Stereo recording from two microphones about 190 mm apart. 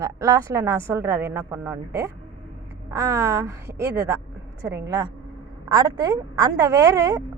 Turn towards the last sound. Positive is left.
turn(degrees=-20)  # may be behind; listen again after turning